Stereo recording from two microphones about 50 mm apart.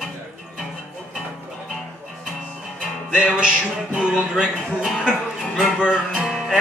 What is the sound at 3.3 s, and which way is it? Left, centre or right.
Music, centre.